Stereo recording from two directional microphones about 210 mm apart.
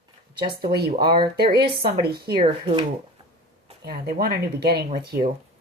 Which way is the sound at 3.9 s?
45° right (ahead or behind).